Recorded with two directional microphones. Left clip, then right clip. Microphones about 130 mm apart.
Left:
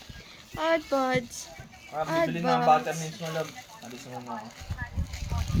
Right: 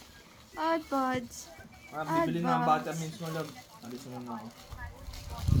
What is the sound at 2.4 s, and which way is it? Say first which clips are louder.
Speech: left 9 dB; 30° left (ahead or behind).